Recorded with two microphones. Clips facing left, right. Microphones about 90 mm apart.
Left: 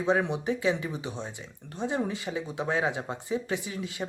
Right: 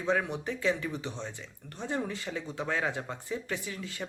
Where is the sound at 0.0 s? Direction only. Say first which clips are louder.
Left 4 dB; 20° left (ahead or behind).